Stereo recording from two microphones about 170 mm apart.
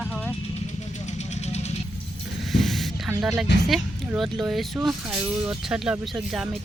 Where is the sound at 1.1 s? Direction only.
40° left (ahead or behind).